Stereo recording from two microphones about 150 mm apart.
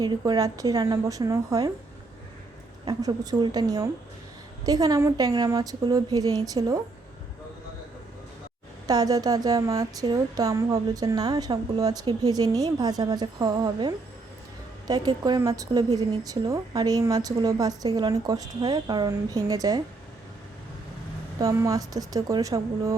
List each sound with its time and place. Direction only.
0.0 s speech: 25° right (ahead or behind)
2.8 s speech: 25° right (ahead or behind)
8.9 s speech: 25° right (ahead or behind)
21.3 s speech: 20° right (ahead or behind)